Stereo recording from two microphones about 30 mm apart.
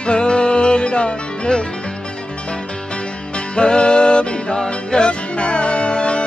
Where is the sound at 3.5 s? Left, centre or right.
Left.